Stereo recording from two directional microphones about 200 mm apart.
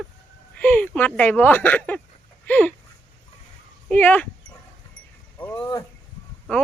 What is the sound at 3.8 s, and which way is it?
Speech, 10° left (ahead or behind).